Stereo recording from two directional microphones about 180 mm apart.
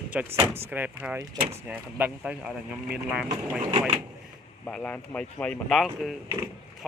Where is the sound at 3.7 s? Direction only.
40° right (ahead or behind).